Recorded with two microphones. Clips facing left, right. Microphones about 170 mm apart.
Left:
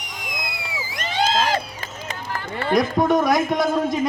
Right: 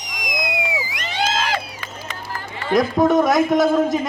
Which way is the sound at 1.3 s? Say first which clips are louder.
Left 2 dB; 40° left (ahead or behind).